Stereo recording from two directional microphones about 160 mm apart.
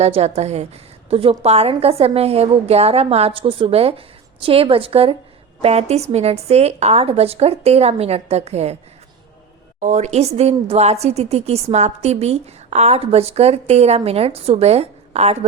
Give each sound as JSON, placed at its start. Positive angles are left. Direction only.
{"t": 0.0, "sound": "a woman's voice", "side_deg": -40}
{"t": 9.8, "sound": "a woman's voice", "side_deg": -45}